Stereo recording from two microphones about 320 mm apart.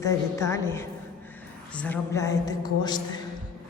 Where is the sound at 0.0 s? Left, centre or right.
Centre.